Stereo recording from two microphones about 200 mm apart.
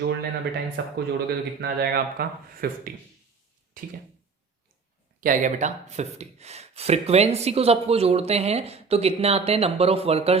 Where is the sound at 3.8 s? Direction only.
45° right (ahead or behind).